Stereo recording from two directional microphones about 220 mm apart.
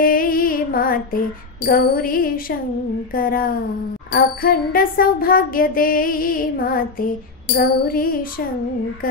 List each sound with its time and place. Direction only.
0.0 s music: 40° left (ahead or behind)